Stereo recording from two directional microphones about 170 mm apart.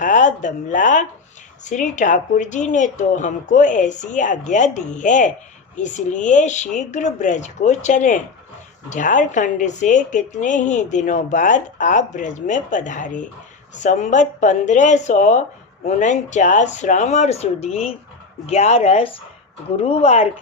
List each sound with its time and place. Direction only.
0.0 s a woman's voice: 50° left (ahead or behind)